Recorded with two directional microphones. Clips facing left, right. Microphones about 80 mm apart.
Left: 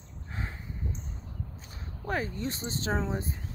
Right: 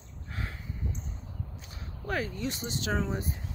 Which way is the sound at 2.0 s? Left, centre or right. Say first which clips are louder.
Even; left.